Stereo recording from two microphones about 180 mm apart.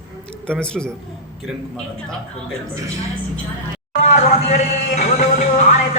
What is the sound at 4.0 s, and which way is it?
Music, 40° left (ahead or behind).